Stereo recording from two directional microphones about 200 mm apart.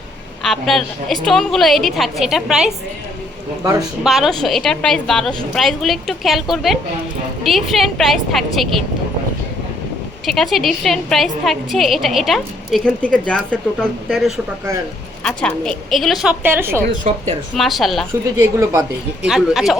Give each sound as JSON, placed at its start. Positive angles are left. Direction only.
{"t": 0.4, "sound": "a woman's voice", "side_deg": 0}
{"t": 3.6, "sound": "speech", "side_deg": -15}
{"t": 4.0, "sound": "a woman's voice", "side_deg": 0}
{"t": 10.2, "sound": "a woman's voice", "side_deg": 0}
{"t": 18.3, "sound": "speech", "side_deg": -15}
{"t": 19.3, "sound": "a woman's voice", "side_deg": 0}